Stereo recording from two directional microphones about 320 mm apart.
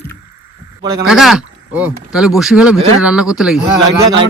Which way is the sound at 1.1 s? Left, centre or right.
Centre.